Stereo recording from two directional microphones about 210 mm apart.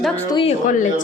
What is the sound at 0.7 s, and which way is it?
Speech, 35° left (ahead or behind).